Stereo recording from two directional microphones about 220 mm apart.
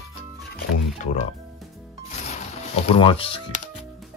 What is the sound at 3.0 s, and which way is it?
Speech, 25° left (ahead or behind).